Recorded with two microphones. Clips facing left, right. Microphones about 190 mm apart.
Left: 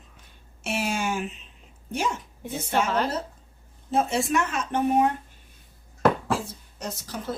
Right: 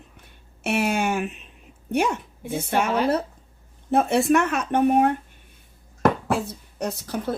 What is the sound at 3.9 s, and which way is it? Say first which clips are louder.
Speech: right 5 dB; 60° right (ahead or behind).